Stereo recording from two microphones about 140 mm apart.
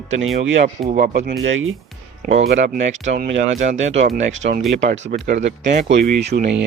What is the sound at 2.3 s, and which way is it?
Speech, 55° right (ahead or behind).